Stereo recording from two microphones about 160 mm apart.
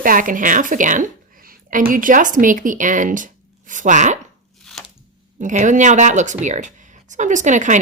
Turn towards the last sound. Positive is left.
turn(degrees=-50)  # may be behind; listen again after turning